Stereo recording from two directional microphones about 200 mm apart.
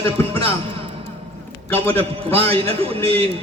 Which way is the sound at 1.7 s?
30° right (ahead or behind).